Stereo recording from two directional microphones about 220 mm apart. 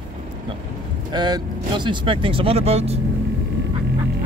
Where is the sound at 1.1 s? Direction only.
20° right (ahead or behind).